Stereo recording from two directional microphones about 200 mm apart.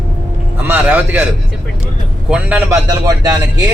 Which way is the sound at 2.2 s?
5° right (ahead or behind).